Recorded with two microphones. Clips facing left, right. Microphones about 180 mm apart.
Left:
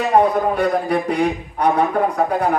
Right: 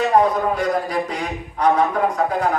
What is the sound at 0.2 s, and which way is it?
A man's voice, 60° left (ahead or behind).